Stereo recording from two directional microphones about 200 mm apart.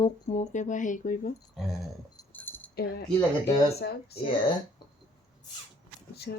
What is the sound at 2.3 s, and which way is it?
Keys jangling, 10° left (ahead or behind).